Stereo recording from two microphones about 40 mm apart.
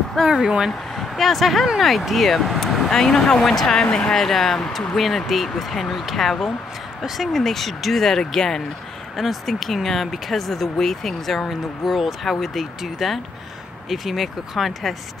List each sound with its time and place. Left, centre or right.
0.3 s speech: centre
0.7 s speech: centre
2.9 s speech: centre
3.7 s speech: centre
4.2 s speech: centre
9.1 s speech: centre